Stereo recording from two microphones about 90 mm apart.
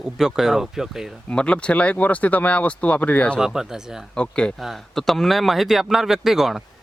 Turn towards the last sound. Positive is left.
turn(degrees=-5)  # may be behind; listen again after turning